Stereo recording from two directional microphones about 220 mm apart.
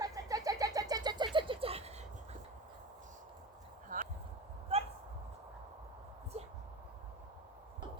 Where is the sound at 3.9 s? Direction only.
40° right (ahead or behind).